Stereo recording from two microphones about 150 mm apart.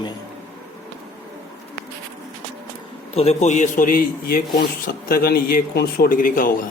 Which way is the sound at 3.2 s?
45° left (ahead or behind).